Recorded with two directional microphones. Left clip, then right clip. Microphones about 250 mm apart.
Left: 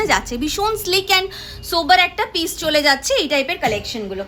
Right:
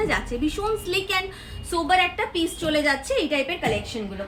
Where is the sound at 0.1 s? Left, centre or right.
Left.